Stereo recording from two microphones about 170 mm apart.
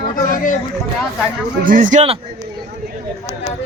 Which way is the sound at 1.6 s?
50° right (ahead or behind).